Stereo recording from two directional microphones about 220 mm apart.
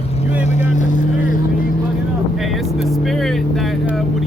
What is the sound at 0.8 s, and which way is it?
Vehicle, 35° left (ahead or behind).